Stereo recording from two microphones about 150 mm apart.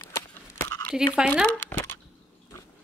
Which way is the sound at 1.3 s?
10° left (ahead or behind).